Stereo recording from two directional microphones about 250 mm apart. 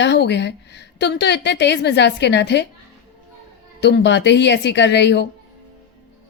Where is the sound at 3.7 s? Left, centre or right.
Left.